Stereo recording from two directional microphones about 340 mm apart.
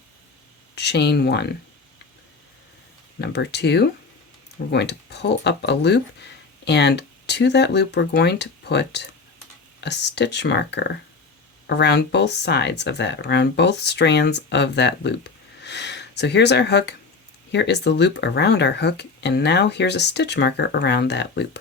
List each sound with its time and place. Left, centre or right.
0.8 s speech: left
3.2 s speech: left